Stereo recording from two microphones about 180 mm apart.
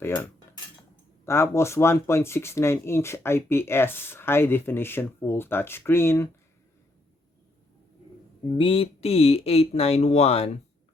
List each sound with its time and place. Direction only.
0.0 s cutlery: 20° left (ahead or behind)
1.2 s speech: 15° left (ahead or behind)
8.5 s speech: 30° left (ahead or behind)